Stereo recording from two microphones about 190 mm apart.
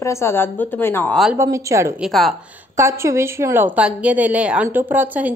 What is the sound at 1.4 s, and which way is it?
Speech, 15° right (ahead or behind).